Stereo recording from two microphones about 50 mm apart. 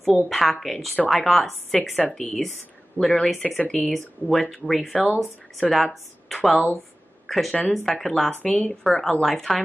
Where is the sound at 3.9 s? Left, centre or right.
Centre.